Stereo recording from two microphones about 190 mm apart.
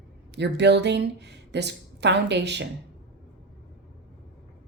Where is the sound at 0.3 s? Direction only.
65° right (ahead or behind).